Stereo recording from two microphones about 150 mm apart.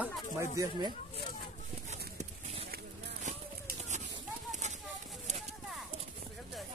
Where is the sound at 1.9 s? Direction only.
50° right (ahead or behind).